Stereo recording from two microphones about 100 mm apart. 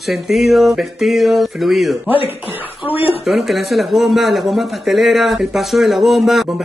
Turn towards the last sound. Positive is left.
turn(degrees=0)  # may be behind; listen again after turning